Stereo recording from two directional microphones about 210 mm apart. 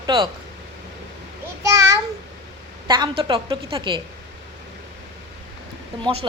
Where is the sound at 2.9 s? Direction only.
20° right (ahead or behind).